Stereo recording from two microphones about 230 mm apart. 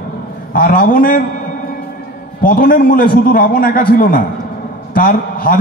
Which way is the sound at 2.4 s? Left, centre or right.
Left.